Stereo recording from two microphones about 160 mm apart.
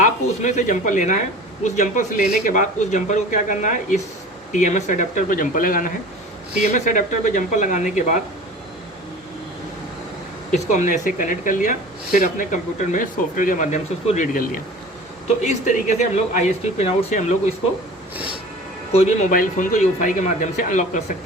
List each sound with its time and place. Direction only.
0.0 s speech: 50° left (ahead or behind)
10.5 s speech: 50° left (ahead or behind)
18.9 s speech: 55° left (ahead or behind)